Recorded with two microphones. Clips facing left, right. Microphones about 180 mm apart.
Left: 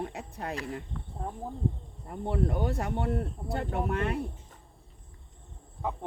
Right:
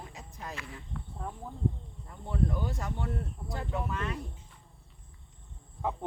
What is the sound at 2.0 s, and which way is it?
Speech, 65° left (ahead or behind).